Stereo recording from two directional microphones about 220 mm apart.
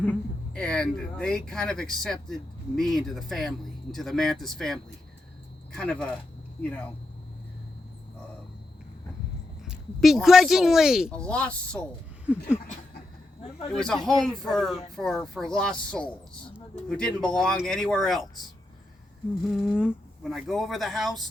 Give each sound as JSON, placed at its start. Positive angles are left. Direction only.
{"t": 0.0, "sound": "speech", "side_deg": 5}
{"t": 9.6, "sound": "speech", "side_deg": 0}
{"t": 13.7, "sound": "speech", "side_deg": 5}
{"t": 19.5, "sound": "speech", "side_deg": 0}